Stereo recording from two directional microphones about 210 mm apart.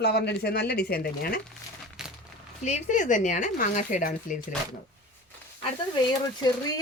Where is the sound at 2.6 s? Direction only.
35° left (ahead or behind).